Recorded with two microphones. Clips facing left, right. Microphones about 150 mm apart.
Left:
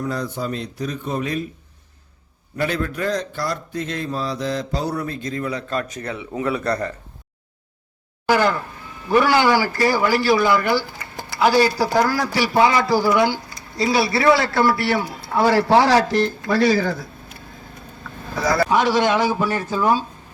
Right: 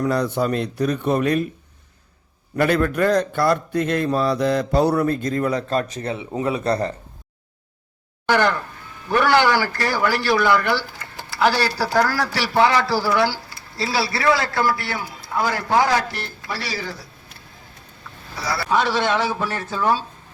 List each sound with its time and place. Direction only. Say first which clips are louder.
0.0 s a man's voice: right 5 dB; 70° right (ahead or behind)
2.6 s a man's voice: right 5 dB; 55° right (ahead or behind); by 6.9 s 25° right (ahead or behind)
8.3 s speech: left 1 dB; 10° left (ahead or behind); by 16.0 s 35° left (ahead or behind)
16.5 s speech: left 10 dB; 50° left (ahead or behind)
18.3 s speech: left 7 dB; 50° left (ahead or behind)
18.7 s speech: right 1 dB; 15° left (ahead or behind)